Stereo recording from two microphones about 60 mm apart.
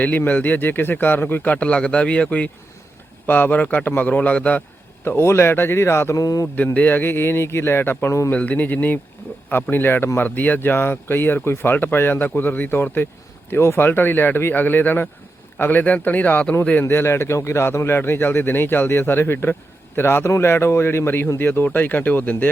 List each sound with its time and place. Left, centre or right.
0.2 s a man's voice: left
5.0 s speech: left
6.1 s mantra: left
6.7 s speech: left
8.3 s a man's voice: left
13.6 s a man's voice: left
16.8 s a man's voice: left